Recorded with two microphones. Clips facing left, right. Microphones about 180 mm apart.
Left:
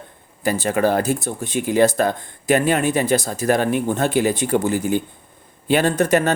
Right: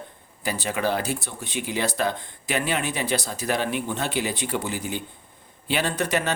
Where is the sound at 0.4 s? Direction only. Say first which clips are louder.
Left 7 dB; 45° left (ahead or behind).